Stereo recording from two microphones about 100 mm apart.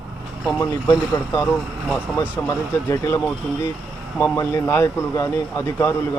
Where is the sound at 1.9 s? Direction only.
15° left (ahead or behind).